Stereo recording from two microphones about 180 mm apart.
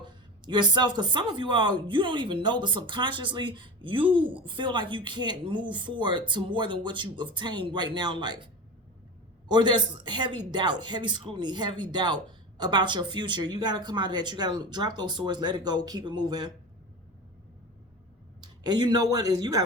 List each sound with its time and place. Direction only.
0.0 s speech: 25° right (ahead or behind)
9.5 s speech: 25° right (ahead or behind)
18.6 s speech: 25° right (ahead or behind)